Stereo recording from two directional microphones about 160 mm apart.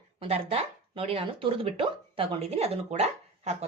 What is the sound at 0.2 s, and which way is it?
Speech, 40° right (ahead or behind).